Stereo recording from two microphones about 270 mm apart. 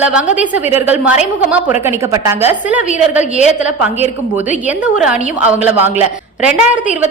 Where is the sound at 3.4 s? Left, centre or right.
Left.